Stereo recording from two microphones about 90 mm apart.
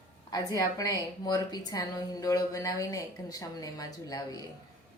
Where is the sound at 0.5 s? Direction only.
40° left (ahead or behind).